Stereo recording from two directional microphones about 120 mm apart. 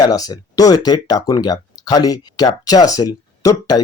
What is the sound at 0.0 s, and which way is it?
Speech, 35° left (ahead or behind).